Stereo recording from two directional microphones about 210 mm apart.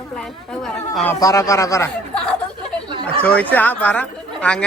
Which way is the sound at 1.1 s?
15° left (ahead or behind).